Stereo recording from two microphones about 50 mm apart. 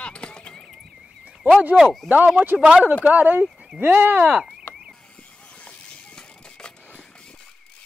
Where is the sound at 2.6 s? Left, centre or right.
Centre.